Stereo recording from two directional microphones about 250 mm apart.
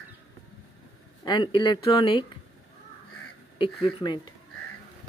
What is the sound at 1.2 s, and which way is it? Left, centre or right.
Speech, centre.